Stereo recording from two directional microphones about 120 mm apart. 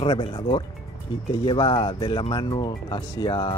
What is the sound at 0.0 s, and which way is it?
Speech, 50° left (ahead or behind).